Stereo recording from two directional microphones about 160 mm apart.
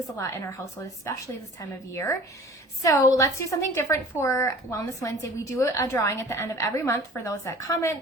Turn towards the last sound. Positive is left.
turn(degrees=20)  # may be behind; listen again after turning